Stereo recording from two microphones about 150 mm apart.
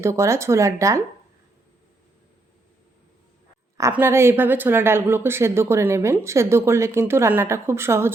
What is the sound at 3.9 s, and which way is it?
Speech, 15° right (ahead or behind).